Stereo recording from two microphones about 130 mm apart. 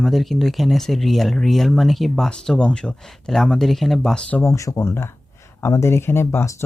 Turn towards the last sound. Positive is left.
turn(degrees=20)  # may be behind; listen again after turning